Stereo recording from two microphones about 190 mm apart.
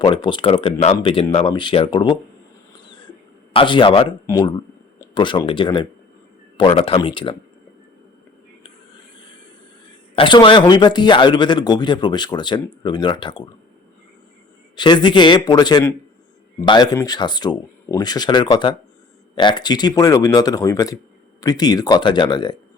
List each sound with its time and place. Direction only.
0.0 s speech: 25° left (ahead or behind)
3.5 s speech: 25° left (ahead or behind)
10.2 s speech: 25° left (ahead or behind)
14.8 s speech: 25° left (ahead or behind)